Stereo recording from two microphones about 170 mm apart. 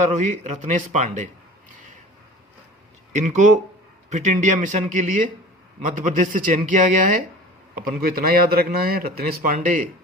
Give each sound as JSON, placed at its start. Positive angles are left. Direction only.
{"t": 0.0, "sound": "speech", "side_deg": -45}
{"t": 3.1, "sound": "speech", "side_deg": -45}
{"t": 7.9, "sound": "speech", "side_deg": -60}